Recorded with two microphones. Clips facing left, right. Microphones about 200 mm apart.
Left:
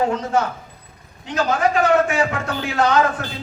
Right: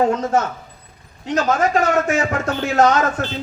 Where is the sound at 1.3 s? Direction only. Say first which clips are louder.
Right 2 dB; 45° right (ahead or behind).